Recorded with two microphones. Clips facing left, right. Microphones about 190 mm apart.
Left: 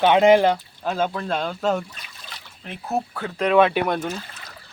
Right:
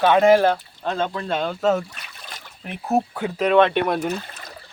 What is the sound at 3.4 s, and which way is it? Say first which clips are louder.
Speech: right 1 dB; centre (ahead or behind).